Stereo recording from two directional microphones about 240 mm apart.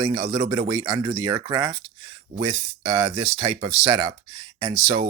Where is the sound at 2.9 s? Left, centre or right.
Right.